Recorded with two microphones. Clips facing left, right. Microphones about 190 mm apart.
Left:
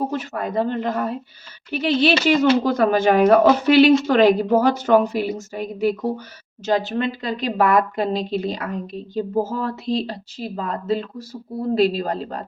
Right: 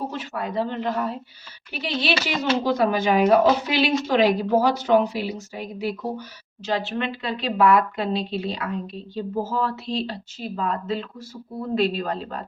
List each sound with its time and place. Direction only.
0.1 s a woman's voice: 45° left (ahead or behind)